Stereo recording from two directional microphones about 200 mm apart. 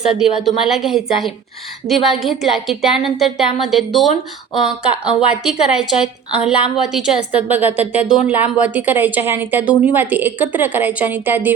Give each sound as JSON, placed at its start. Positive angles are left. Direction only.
{"t": 0.1, "sound": "a woman's voice", "side_deg": 0}